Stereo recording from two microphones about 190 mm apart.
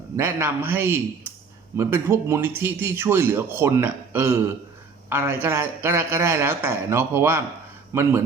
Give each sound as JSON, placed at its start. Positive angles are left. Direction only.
{"t": 0.2, "sound": "speech", "side_deg": -10}